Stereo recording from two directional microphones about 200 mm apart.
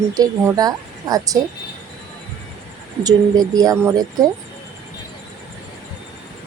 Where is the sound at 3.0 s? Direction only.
20° right (ahead or behind).